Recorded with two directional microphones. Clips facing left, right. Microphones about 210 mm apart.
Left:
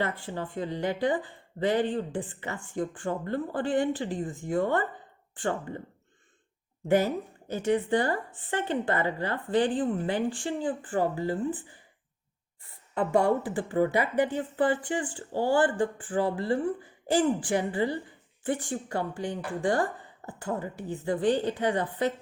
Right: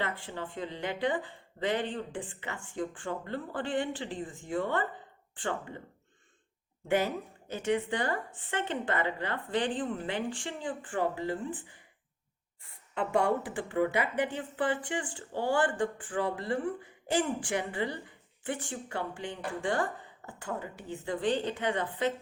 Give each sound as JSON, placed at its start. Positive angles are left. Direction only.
{"t": 0.3, "sound": "speech", "side_deg": 40}
{"t": 6.8, "sound": "speech", "side_deg": 40}
{"t": 12.9, "sound": "speech", "side_deg": 40}